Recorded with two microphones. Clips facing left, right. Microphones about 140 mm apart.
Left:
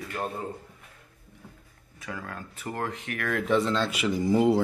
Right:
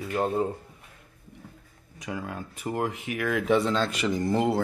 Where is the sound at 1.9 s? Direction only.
15° right (ahead or behind).